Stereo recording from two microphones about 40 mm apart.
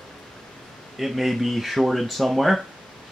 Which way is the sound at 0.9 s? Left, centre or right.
Centre.